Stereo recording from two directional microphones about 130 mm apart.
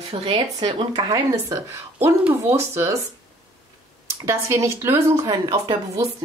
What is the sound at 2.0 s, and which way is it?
Speech, 15° right (ahead or behind).